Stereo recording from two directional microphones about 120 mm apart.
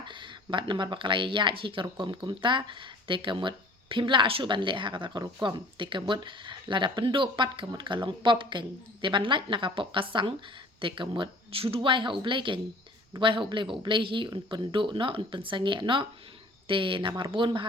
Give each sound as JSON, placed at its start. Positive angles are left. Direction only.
{"t": 0.0, "sound": "speech", "side_deg": -40}